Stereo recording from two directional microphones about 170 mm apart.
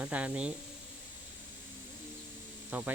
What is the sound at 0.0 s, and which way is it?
Speech, 10° right (ahead or behind).